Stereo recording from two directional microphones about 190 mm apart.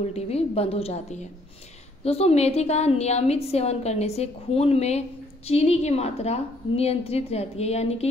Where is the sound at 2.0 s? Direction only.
30° left (ahead or behind).